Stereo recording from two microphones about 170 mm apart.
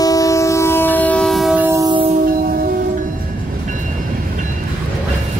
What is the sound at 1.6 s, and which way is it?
Music, 20° right (ahead or behind).